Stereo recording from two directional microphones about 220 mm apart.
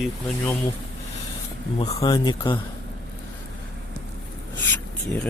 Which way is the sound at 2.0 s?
20° left (ahead or behind).